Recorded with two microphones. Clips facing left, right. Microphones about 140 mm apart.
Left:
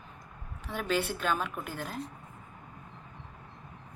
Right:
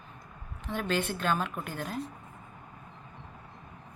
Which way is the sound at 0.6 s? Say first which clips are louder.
Even; 10° left (ahead or behind).